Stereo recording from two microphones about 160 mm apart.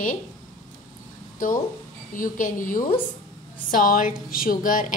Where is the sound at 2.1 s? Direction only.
55° left (ahead or behind).